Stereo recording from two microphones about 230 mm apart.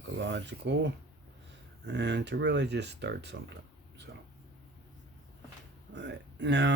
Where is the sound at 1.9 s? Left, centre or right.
Right.